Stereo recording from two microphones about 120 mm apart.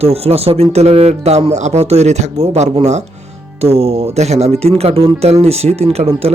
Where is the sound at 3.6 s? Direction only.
60° right (ahead or behind).